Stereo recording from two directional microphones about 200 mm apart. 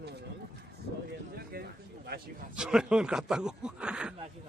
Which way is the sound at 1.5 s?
50° right (ahead or behind).